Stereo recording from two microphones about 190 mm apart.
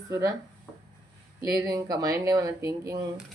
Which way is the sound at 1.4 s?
20° right (ahead or behind).